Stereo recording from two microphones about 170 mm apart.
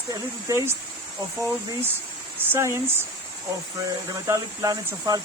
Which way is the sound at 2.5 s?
15° right (ahead or behind).